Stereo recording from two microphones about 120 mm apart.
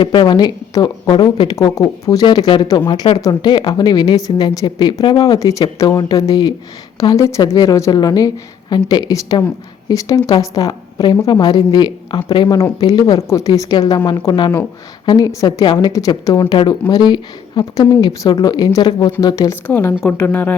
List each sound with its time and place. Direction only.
0.0 s speech: 40° left (ahead or behind)
19.6 s a woman's voice: 15° left (ahead or behind)